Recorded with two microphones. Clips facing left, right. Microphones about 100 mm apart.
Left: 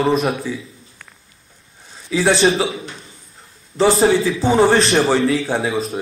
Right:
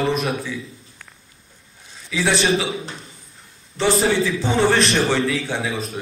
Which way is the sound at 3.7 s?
35° left (ahead or behind).